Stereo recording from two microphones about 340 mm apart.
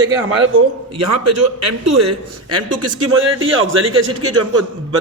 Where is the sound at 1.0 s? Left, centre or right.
Right.